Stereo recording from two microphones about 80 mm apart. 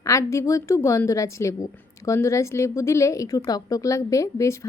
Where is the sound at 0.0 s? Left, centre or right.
Left.